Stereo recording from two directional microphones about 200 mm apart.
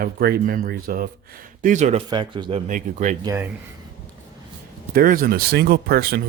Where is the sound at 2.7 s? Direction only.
40° right (ahead or behind).